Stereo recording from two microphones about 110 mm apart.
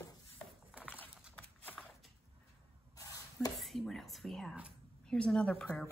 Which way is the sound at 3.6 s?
Centre (ahead or behind).